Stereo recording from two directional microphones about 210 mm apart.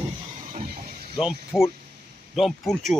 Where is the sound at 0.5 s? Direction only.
40° right (ahead or behind).